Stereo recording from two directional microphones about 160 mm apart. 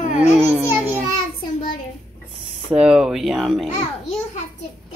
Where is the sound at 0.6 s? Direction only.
10° right (ahead or behind).